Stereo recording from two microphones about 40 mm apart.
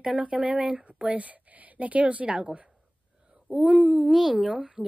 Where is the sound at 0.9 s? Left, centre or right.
Right.